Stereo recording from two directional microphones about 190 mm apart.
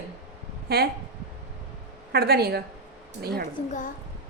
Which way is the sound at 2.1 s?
55° right (ahead or behind).